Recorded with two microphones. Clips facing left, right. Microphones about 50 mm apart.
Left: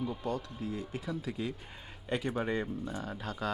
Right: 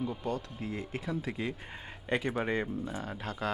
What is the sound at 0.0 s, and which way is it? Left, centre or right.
Speech, centre.